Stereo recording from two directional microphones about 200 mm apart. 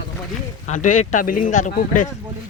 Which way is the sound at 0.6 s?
40° left (ahead or behind).